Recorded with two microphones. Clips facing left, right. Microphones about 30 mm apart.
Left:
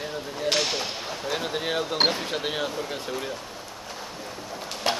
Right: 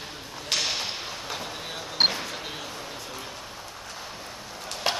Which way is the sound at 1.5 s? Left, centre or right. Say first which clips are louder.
Left 9 dB; left.